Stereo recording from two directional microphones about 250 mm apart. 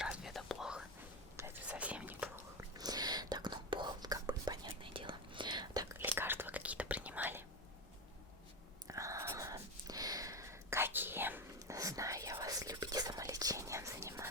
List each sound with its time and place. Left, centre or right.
0.0 s whispering: centre
8.9 s whispering: centre